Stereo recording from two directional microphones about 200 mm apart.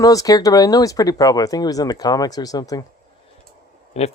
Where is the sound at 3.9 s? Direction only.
35° left (ahead or behind).